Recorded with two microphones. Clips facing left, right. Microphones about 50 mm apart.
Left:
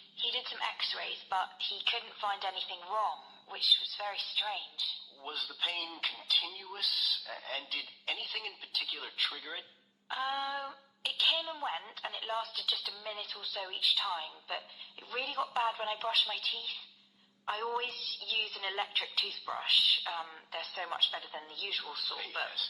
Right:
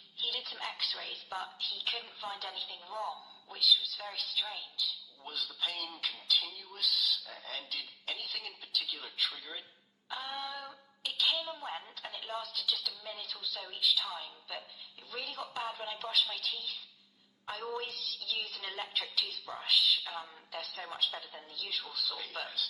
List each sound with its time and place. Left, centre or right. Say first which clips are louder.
0.2 s a woman's voice: left 2 dB; left